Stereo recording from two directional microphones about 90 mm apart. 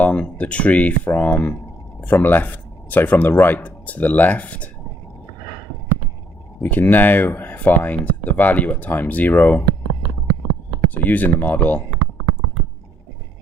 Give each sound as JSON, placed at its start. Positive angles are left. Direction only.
{"t": 0.0, "sound": "speech", "side_deg": 15}
{"t": 6.6, "sound": "speech", "side_deg": 20}
{"t": 10.8, "sound": "speech", "side_deg": 20}